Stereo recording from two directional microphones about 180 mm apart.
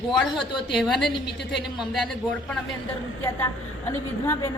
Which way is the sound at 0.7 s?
Centre (ahead or behind).